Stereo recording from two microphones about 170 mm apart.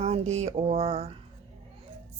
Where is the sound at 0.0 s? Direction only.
40° right (ahead or behind).